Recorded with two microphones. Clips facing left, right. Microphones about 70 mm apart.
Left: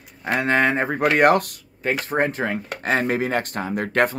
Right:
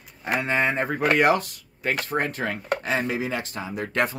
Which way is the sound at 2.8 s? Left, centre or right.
Left.